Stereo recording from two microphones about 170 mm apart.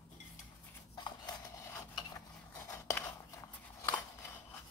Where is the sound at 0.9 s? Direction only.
25° left (ahead or behind).